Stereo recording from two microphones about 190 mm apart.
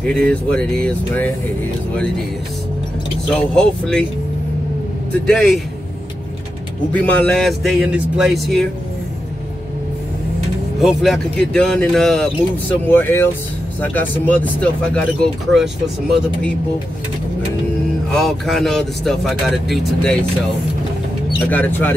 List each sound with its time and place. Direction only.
0.0 s speech: 5° left (ahead or behind)
3.3 s speech: 5° left (ahead or behind)
5.2 s speech: centre (ahead or behind)
6.9 s speech: 5° left (ahead or behind)
10.8 s speech: centre (ahead or behind)
18.1 s speech: centre (ahead or behind)
21.5 s speech: 10° left (ahead or behind)